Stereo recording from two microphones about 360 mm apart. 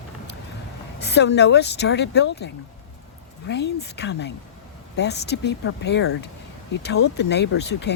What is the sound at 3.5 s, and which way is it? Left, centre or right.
Speech, left.